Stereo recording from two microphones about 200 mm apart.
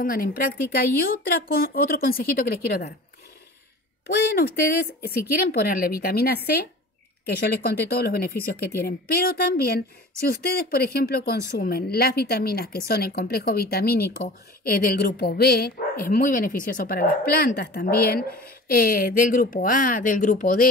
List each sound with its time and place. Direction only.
0.0 s speech: 45° left (ahead or behind)
4.1 s speech: 50° left (ahead or behind)